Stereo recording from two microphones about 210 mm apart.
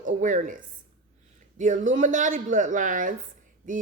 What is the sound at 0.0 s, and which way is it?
Speech, 40° right (ahead or behind).